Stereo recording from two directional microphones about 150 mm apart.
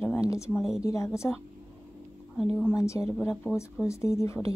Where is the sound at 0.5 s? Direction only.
Centre (ahead or behind).